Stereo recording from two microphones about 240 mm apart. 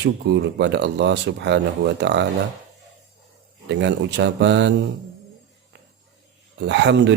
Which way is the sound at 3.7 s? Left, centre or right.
Right.